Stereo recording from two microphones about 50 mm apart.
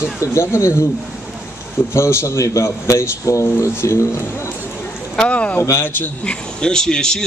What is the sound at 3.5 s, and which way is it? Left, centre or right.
Speech, left.